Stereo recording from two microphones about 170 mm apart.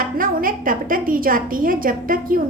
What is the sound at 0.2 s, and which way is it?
A woman's voice, 55° right (ahead or behind).